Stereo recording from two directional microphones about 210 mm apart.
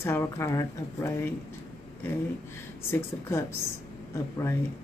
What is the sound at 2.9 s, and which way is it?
Speech, 10° left (ahead or behind).